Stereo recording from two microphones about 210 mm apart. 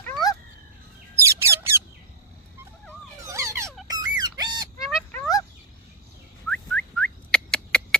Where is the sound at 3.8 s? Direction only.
20° right (ahead or behind).